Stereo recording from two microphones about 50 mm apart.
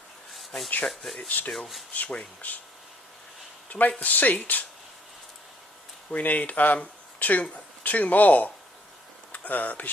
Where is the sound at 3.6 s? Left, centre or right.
Left.